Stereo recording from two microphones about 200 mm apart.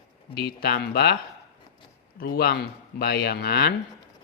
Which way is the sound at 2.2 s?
50° left (ahead or behind).